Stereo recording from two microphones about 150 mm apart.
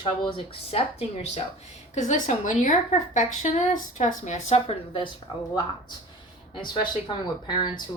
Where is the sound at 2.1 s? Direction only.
60° left (ahead or behind); by 5.0 s 35° left (ahead or behind).